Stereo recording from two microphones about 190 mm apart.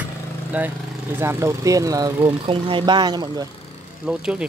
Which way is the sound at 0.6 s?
5° right (ahead or behind).